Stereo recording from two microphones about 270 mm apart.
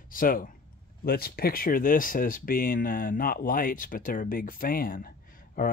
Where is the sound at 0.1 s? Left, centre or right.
Left.